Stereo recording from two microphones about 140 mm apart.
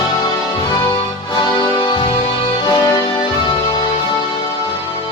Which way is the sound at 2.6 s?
30° left (ahead or behind).